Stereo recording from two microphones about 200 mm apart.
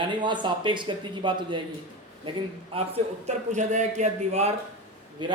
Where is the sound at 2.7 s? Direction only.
30° right (ahead or behind).